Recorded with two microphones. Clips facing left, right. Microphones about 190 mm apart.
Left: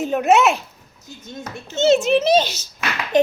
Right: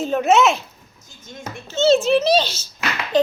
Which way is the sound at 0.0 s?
15° left (ahead or behind).